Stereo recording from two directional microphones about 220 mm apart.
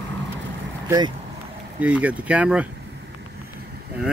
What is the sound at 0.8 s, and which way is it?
Speech, 20° right (ahead or behind).